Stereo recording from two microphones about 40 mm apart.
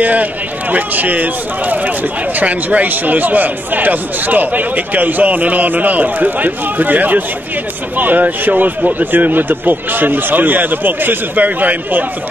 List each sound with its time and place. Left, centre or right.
0.0 s speech: right
11.3 s speech: right